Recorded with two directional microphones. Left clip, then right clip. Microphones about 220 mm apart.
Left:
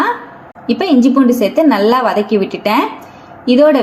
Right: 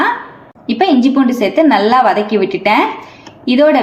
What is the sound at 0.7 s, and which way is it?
A woman's voice, 30° left (ahead or behind).